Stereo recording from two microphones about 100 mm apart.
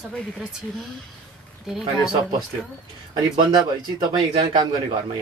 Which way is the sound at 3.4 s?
45° right (ahead or behind).